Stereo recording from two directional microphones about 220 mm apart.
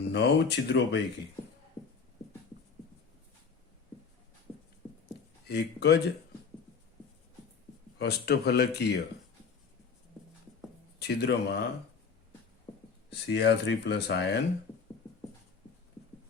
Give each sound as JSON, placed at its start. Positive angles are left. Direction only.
{"t": 0.1, "sound": "speech", "side_deg": 50}
{"t": 5.5, "sound": "speech", "side_deg": 50}
{"t": 7.9, "sound": "speech", "side_deg": 50}
{"t": 11.0, "sound": "speech", "side_deg": 50}
{"t": 12.7, "sound": "a sound", "side_deg": 25}
{"t": 13.1, "sound": "speech", "side_deg": 50}